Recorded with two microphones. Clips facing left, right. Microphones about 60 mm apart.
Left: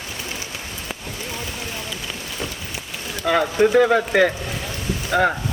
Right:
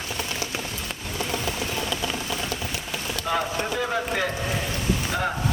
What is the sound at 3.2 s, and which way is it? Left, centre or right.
Speech, left.